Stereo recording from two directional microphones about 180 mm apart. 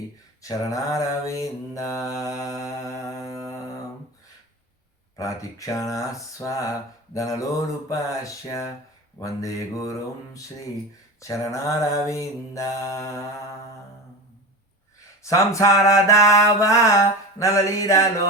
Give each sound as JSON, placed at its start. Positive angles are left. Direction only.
{"t": 0.4, "sound": "mantra", "side_deg": 20}
{"t": 5.1, "sound": "mantra", "side_deg": 20}
{"t": 11.2, "sound": "mantra", "side_deg": 15}
{"t": 15.2, "sound": "mantra", "side_deg": 15}